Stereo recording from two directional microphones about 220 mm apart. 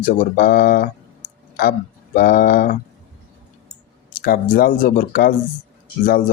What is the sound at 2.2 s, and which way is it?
Speech, 40° left (ahead or behind).